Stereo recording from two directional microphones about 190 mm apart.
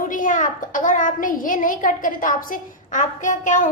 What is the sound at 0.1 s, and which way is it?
A woman's voice, 45° left (ahead or behind).